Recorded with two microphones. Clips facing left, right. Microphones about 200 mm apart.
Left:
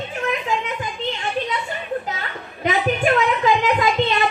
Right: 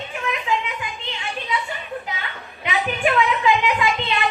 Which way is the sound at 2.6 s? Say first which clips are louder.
Left 3 dB; 40° left (ahead or behind).